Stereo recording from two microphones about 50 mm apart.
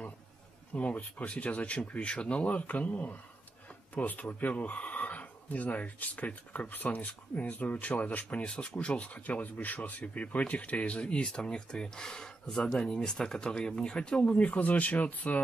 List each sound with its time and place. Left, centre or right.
0.7 s speech: left